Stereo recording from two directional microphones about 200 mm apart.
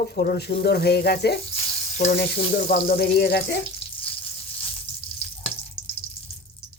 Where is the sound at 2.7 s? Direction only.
50° left (ahead or behind).